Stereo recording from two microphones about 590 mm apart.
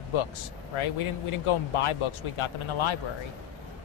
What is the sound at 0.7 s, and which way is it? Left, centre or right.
Speech, left.